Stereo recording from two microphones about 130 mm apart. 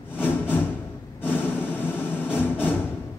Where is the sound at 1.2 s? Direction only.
15° left (ahead or behind).